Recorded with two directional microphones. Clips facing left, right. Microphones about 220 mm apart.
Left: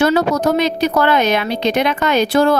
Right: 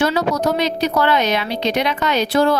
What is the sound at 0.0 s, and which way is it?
Speech, 50° left (ahead or behind).